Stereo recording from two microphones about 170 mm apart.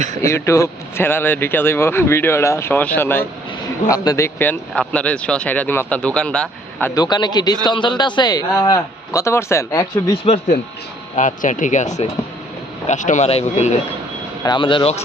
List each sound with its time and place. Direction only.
0.2 s speech: 15° left (ahead or behind)
6.9 s a man's voice: 25° left (ahead or behind)
11.1 s speech: 50° left (ahead or behind)
14.4 s a man's voice: 30° left (ahead or behind)